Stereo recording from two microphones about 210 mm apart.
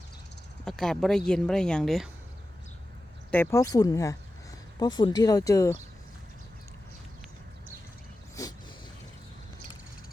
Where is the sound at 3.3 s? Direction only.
10° left (ahead or behind).